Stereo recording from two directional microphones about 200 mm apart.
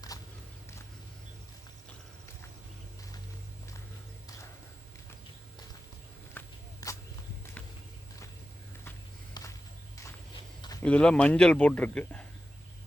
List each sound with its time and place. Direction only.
0.1 s a sound: 20° left (ahead or behind)
6.4 s walk: 10° left (ahead or behind)
9.4 s walk: 20° left (ahead or behind)
10.8 s a man's voice: 5° left (ahead or behind)